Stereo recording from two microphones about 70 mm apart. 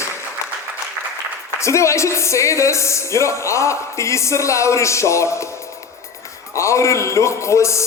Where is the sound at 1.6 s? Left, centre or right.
Left.